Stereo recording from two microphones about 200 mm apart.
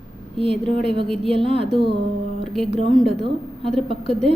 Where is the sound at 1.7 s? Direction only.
25° right (ahead or behind).